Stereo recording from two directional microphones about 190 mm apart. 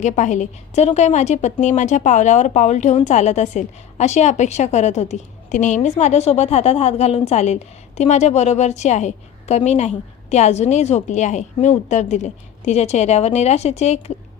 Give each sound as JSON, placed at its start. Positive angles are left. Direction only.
{"t": 0.0, "sound": "speech", "side_deg": 40}